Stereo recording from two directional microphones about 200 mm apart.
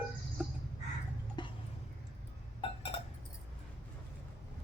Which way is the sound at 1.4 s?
25° left (ahead or behind).